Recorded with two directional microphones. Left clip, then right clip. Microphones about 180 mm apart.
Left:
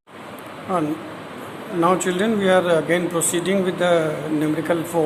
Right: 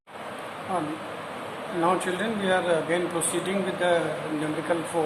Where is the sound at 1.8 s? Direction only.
40° left (ahead or behind).